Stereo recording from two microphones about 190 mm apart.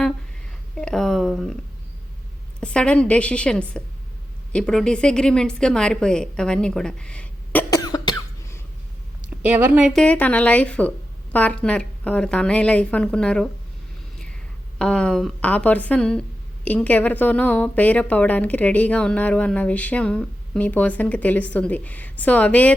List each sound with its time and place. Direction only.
0.8 s speech: 5° left (ahead or behind)
2.6 s a woman's voice: 5° left (ahead or behind)
7.7 s cough: 20° left (ahead or behind)
9.4 s a woman's voice: 10° right (ahead or behind)
14.8 s a woman's voice: 5° left (ahead or behind)